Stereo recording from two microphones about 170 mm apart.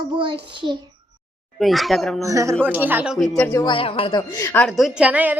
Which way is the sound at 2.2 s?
20° right (ahead or behind).